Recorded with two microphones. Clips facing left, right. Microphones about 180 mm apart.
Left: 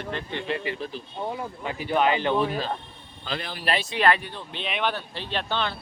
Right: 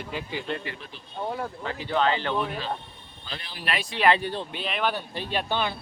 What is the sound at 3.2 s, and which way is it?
Speech, 90° left.